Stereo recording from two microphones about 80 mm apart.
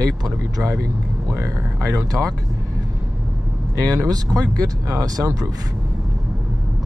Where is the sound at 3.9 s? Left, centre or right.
Right.